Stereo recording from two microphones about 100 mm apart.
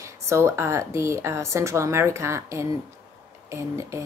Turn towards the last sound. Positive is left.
turn(degrees=-30)  # may be behind; listen again after turning